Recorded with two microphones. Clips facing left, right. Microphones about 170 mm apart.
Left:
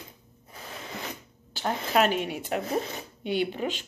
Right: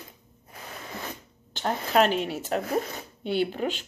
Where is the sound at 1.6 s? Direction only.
35° right (ahead or behind).